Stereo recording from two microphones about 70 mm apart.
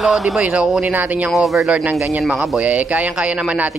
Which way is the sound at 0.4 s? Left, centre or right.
Centre.